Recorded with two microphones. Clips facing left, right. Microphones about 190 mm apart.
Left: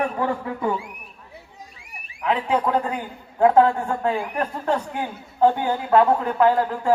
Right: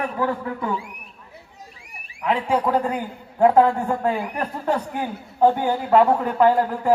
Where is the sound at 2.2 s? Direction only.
10° right (ahead or behind).